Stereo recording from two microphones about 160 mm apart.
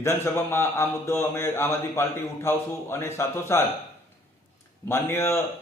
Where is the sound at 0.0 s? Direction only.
15° left (ahead or behind).